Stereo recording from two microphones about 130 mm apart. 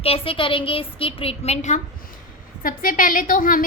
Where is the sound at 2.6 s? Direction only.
90° left.